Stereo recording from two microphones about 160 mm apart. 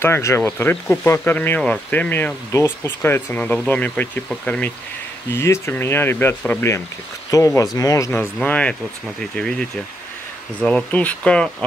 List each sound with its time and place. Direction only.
0.0 s speech: 15° left (ahead or behind)
8.4 s speech: 10° left (ahead or behind)